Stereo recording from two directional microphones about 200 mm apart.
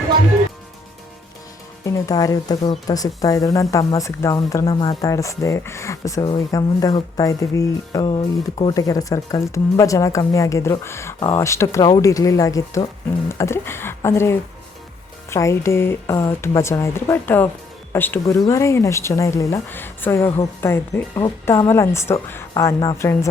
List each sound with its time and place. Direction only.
1.8 s speech: 15° left (ahead or behind)